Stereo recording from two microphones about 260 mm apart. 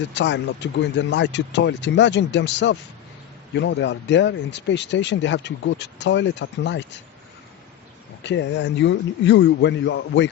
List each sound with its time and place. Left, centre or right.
0.1 s speech: left
8.2 s speech: left